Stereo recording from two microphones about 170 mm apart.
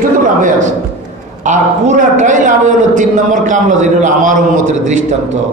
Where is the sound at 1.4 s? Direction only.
45° right (ahead or behind).